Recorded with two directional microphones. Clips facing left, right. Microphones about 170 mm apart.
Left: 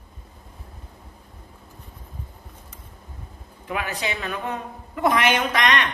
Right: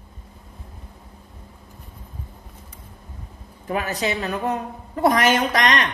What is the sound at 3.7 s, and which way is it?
A woman's voice, 40° right (ahead or behind).